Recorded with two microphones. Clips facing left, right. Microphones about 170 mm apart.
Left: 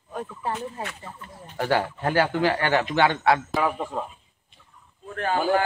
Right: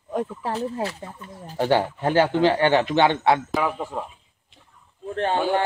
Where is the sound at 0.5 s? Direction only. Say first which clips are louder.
Right 6 dB; 35° right (ahead or behind).